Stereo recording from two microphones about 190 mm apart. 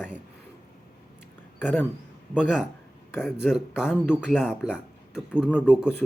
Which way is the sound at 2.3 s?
5° right (ahead or behind).